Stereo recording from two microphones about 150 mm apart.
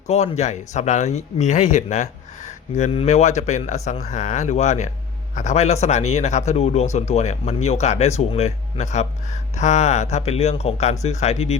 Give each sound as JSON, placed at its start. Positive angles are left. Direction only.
{"t": 0.1, "sound": "speech", "side_deg": 45}